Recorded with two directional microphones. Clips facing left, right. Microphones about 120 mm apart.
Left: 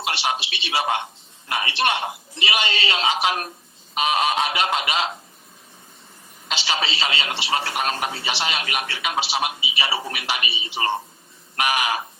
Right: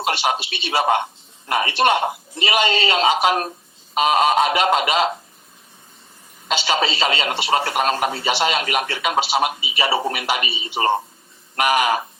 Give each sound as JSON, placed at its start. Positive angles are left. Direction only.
{"t": 0.0, "sound": "speech", "side_deg": -45}
{"t": 6.5, "sound": "speech", "side_deg": -45}